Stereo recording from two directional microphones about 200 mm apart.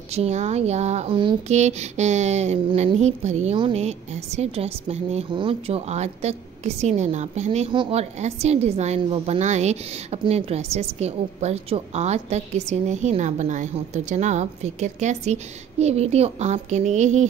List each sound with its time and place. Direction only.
0.1 s speech: 35° right (ahead or behind)